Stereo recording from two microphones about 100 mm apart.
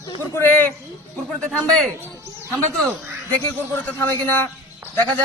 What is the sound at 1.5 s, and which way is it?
Speech, 5° left (ahead or behind).